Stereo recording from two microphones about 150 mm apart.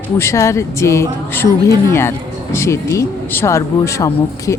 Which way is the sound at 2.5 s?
20° left (ahead or behind).